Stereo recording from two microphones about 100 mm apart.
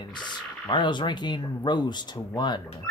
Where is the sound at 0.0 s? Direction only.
50° left (ahead or behind).